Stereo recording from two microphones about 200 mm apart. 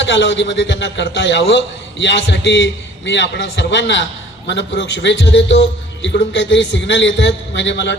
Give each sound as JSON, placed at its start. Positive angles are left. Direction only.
{"t": 0.0, "sound": "a man's voice", "side_deg": 65}